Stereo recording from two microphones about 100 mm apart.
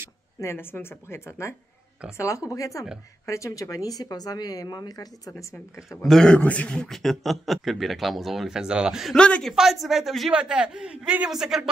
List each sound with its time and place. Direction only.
0.4 s speech: 25° left (ahead or behind)
6.0 s a man's voice: 5° left (ahead or behind)
9.1 s a man's voice: 10° left (ahead or behind)
9.5 s a man's voice: 5° right (ahead or behind)